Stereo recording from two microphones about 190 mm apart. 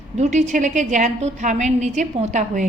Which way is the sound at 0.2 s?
40° right (ahead or behind).